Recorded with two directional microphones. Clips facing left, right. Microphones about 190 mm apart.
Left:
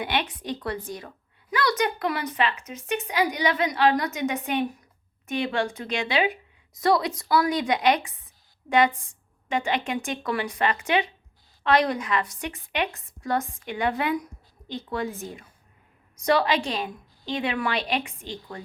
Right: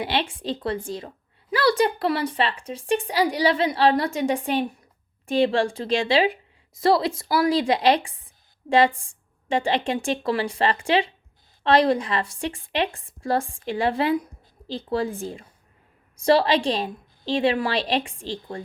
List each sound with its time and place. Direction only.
0.0 s a woman's voice: 30° right (ahead or behind)